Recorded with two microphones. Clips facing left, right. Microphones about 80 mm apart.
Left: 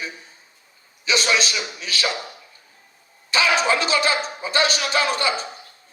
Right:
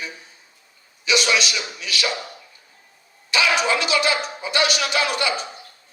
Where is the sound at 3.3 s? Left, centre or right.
Left.